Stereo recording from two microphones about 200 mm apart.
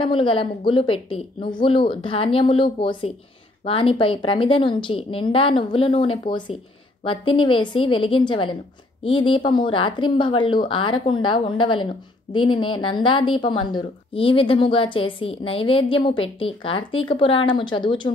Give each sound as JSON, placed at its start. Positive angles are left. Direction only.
{"t": 0.0, "sound": "a woman's voice", "side_deg": 25}